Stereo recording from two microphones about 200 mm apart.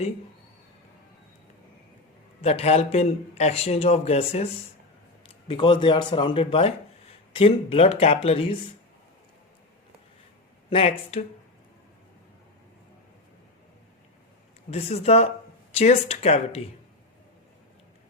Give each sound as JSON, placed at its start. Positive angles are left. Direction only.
{"t": 2.4, "sound": "a man's voice", "side_deg": 30}
{"t": 10.7, "sound": "speech", "side_deg": 30}
{"t": 14.7, "sound": "a man's voice", "side_deg": 30}